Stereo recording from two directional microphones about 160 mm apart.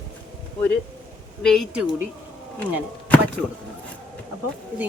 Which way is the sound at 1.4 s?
5° left (ahead or behind).